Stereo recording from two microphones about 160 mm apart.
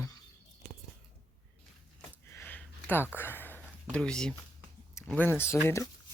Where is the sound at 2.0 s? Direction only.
10° left (ahead or behind).